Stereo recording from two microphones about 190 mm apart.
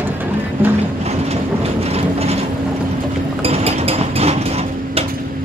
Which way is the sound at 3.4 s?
30° right (ahead or behind).